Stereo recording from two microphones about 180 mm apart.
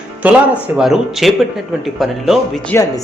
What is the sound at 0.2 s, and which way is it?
Speech, 10° right (ahead or behind).